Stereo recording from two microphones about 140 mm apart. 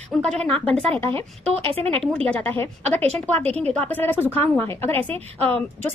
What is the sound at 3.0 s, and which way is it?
Speech, 45° right (ahead or behind).